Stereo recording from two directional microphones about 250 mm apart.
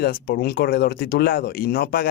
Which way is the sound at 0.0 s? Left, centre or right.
Left.